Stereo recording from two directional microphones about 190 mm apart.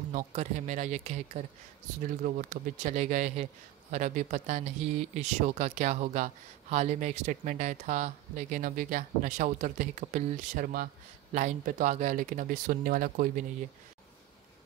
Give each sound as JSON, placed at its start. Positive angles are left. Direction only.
{"t": 0.1, "sound": "speech", "side_deg": -40}